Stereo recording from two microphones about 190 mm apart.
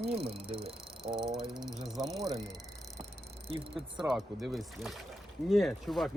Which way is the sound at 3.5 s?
30° right (ahead or behind).